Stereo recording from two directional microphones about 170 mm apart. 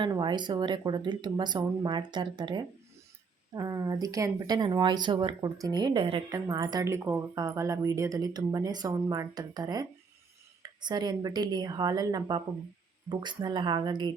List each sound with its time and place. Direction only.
0.0 s speech: 25° right (ahead or behind)